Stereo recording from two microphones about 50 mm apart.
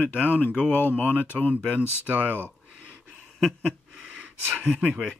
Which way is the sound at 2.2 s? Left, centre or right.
Left.